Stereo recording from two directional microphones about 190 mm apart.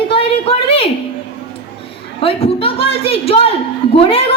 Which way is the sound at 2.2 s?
30° left (ahead or behind).